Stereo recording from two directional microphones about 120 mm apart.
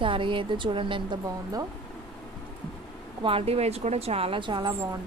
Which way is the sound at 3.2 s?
50° right (ahead or behind).